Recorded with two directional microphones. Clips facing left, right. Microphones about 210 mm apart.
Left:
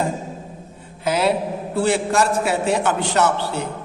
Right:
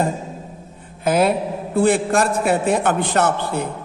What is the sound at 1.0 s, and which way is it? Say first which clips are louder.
A man's voice: right 2 dB; 50° right (ahead or behind).